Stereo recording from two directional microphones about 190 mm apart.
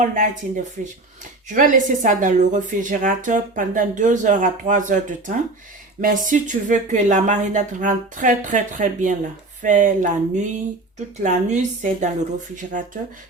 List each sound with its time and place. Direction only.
0.0 s speech: 45° right (ahead or behind)